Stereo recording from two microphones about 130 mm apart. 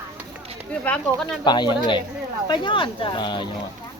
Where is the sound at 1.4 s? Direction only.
35° left (ahead or behind).